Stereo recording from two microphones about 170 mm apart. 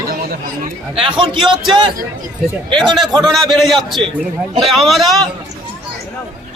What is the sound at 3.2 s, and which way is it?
A man's voice, centre (ahead or behind).